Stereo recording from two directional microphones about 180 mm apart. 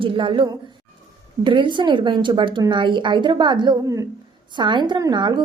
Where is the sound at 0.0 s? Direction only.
30° right (ahead or behind).